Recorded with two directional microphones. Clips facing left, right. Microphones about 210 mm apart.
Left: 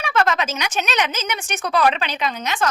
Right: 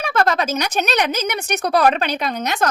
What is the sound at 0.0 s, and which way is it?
Speech, 35° right (ahead or behind).